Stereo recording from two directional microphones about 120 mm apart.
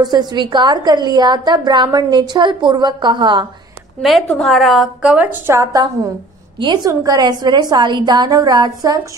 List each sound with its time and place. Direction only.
0.0 s a woman's voice: 35° right (ahead or behind)
4.3 s a woman's voice: centre (ahead or behind); by 8.9 s 35° right (ahead or behind)